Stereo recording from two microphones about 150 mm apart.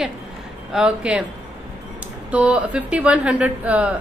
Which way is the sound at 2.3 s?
10° right (ahead or behind).